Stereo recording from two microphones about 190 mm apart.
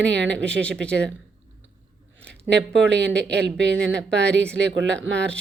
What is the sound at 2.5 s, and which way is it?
Speech, 65° right (ahead or behind).